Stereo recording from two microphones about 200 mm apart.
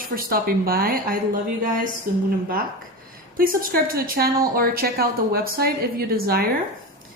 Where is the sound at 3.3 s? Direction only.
45° right (ahead or behind).